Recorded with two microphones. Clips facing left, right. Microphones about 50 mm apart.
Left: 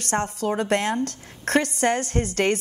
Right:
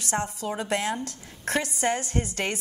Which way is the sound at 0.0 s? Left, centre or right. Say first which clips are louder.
Left 4 dB; left.